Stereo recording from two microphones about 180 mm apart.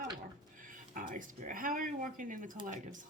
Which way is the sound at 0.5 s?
50° right (ahead or behind).